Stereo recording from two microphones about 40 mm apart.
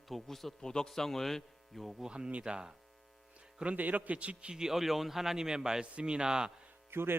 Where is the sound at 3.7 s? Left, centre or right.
Right.